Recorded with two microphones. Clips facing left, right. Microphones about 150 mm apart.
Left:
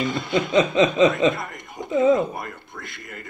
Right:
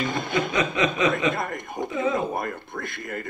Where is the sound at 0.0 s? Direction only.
50° right (ahead or behind).